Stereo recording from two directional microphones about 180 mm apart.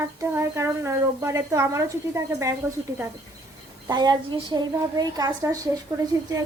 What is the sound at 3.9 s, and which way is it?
A woman's voice, 20° right (ahead or behind).